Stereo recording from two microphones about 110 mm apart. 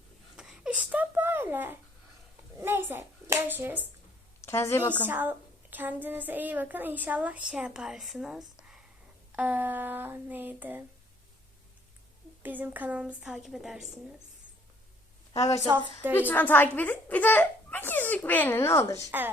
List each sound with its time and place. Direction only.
0.3 s a sound: 5° right (ahead or behind)
2.6 s hands: 20° right (ahead or behind)
4.4 s a woman's voice: 20° left (ahead or behind)
5.0 s a woman's voice: 15° right (ahead or behind)
9.3 s a woman's voice: 15° right (ahead or behind)
12.4 s a woman's voice: 15° right (ahead or behind)
16.1 s a child's voice: 15° left (ahead or behind)